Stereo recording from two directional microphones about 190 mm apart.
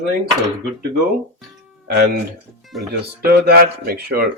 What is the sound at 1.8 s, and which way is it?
A man's voice, 55° right (ahead or behind).